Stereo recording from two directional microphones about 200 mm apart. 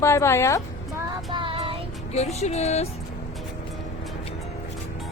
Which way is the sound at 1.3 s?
25° right (ahead or behind).